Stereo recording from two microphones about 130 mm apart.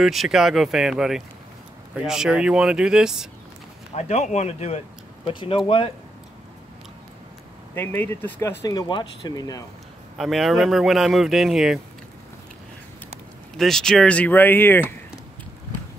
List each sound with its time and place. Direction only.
0.0 s a man's voice: centre (ahead or behind)
3.9 s speech: 55° left (ahead or behind)
5.2 s speech: 40° left (ahead or behind)
7.7 s speech: 15° left (ahead or behind)
8.7 s speech: 35° left (ahead or behind)
10.1 s a man's voice: centre (ahead or behind)
13.6 s speech: 5° left (ahead or behind)